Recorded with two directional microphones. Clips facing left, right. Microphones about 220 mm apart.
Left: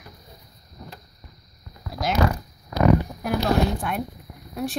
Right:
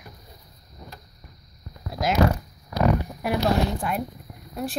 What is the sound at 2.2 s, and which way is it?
Speech, 35° right (ahead or behind).